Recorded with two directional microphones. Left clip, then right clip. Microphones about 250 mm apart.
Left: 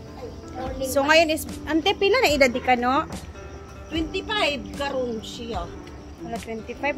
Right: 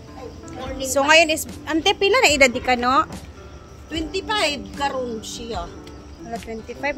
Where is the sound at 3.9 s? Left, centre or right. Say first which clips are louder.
Right 2 dB; right.